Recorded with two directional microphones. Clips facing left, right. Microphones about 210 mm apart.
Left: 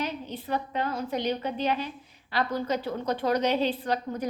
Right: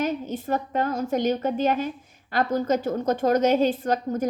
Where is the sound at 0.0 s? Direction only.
45° right (ahead or behind).